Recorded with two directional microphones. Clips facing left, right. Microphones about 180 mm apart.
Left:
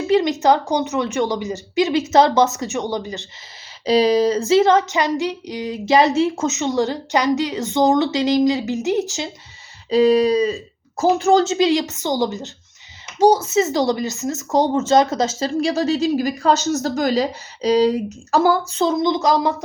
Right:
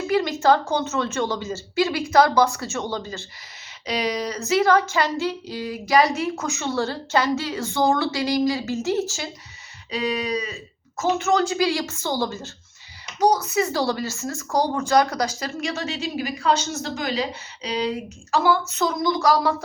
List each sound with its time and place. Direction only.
0.1 s a woman's voice: 20° left (ahead or behind)
3.8 s speech: 30° left (ahead or behind)
9.9 s speech: 35° left (ahead or behind)
18.7 s speech: 25° left (ahead or behind)